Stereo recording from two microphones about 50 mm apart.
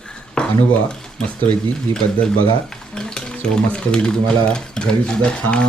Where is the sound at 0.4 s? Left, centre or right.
Centre.